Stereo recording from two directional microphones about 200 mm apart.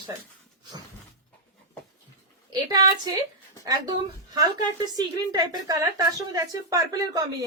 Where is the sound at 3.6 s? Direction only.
20° right (ahead or behind).